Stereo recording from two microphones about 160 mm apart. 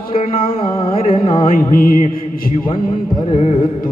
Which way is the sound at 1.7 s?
65° left (ahead or behind).